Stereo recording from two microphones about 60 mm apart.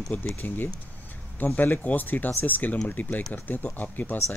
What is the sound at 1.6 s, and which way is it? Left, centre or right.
Speech, left.